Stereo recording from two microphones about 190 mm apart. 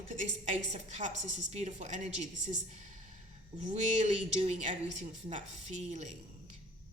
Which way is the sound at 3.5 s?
40° right (ahead or behind).